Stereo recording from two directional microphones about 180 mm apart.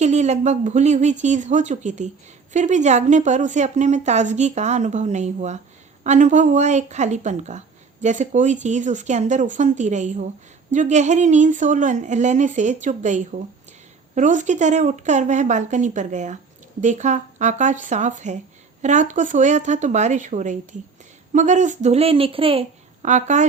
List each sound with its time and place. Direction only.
0.0 s a woman's voice: 40° right (ahead or behind)
23.0 s a woman's voice: 40° right (ahead or behind)